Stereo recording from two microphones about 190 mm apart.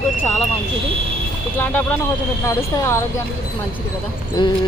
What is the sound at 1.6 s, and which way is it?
Speech, 5° left (ahead or behind).